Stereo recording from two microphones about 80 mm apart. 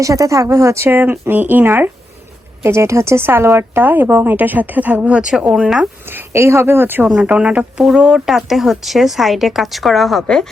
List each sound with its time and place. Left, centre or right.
0.0 s a woman's voice: right
2.6 s a woman's voice: right; by 5.9 s centre
6.1 s a woman's voice: right
7.1 s speech: centre